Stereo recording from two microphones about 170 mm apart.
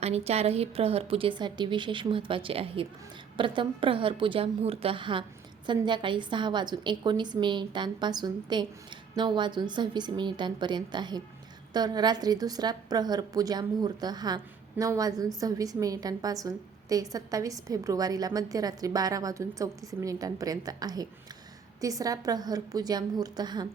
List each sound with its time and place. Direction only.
0.0 s a woman's voice: 40° right (ahead or behind)